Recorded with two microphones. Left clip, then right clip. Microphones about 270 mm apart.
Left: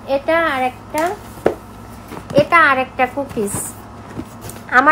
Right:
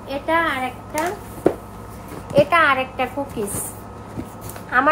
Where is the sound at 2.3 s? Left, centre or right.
Left.